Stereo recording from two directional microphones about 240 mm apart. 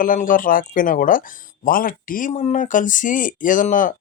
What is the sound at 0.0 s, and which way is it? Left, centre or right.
Speech, left.